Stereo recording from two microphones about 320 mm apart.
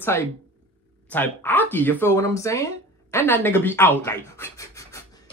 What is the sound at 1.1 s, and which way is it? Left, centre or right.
Speech, centre.